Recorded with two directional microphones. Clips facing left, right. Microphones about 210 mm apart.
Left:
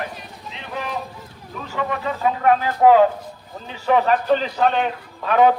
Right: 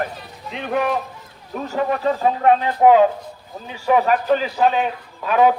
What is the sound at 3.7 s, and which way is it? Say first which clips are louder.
A man's voice: right 1 dB; 10° right (ahead or behind).